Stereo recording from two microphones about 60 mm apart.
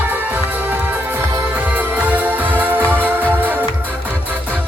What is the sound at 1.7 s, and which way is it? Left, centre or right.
Music, right.